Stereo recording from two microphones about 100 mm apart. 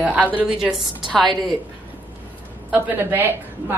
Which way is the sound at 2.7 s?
20° right (ahead or behind).